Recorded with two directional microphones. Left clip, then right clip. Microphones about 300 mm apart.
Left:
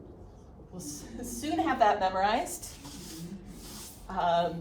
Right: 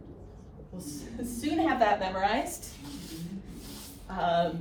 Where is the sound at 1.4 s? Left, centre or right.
Centre.